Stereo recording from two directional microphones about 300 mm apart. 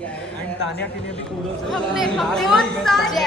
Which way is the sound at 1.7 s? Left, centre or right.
Centre.